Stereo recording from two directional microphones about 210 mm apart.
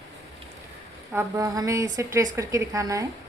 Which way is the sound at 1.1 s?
15° right (ahead or behind).